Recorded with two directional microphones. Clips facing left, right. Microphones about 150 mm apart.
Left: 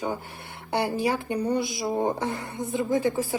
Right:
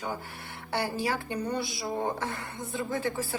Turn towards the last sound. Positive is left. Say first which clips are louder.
# left 7 dB
turn(degrees=15)  # may be behind; listen again after turning